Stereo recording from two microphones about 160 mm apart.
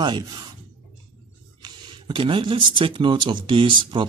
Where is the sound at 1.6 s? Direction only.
30° right (ahead or behind).